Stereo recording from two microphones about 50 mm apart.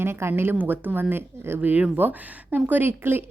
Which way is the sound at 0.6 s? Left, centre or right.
Right.